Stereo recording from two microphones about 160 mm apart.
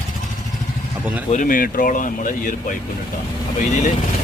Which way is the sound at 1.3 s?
55° left (ahead or behind).